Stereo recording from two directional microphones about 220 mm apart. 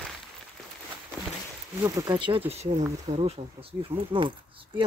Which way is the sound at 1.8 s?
15° right (ahead or behind).